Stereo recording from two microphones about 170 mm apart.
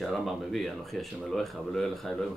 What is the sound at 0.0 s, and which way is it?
Speech, centre (ahead or behind).